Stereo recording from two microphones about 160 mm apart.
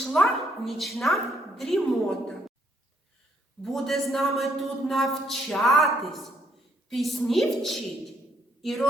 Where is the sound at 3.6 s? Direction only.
Centre (ahead or behind).